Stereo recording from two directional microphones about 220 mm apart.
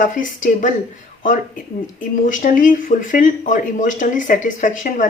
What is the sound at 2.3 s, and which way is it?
Speech, 35° left (ahead or behind).